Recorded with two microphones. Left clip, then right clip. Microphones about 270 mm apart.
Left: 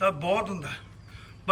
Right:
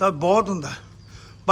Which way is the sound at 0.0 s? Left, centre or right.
Centre.